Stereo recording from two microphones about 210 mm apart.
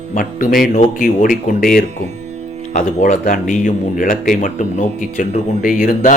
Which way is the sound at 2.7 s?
35° left (ahead or behind).